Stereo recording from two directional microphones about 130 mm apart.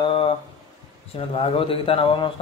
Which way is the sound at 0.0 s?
45° left (ahead or behind).